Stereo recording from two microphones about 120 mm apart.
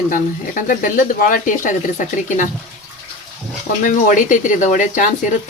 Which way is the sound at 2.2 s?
90° left.